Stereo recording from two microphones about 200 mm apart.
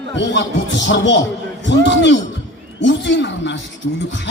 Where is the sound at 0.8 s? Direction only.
65° left (ahead or behind).